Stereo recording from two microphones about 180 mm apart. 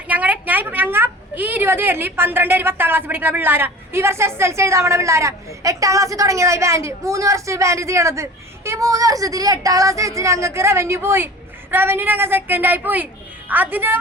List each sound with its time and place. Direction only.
0.1 s a woman's voice: 10° right (ahead or behind)